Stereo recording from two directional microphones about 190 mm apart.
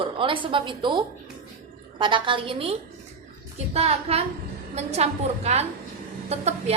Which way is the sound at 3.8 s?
30° right (ahead or behind).